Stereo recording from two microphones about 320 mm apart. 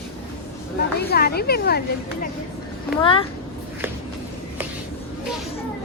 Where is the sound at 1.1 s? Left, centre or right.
Left.